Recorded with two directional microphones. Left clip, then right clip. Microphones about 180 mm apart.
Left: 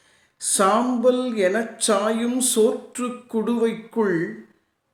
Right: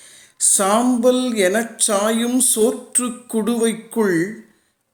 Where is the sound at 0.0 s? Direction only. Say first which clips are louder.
Right 10 dB; 45° right (ahead or behind).